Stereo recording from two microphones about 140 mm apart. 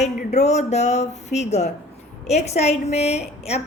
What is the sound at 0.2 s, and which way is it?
A woman's voice, 55° left (ahead or behind).